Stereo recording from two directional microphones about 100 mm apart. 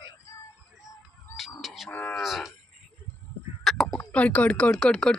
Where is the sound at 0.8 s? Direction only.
5° right (ahead or behind).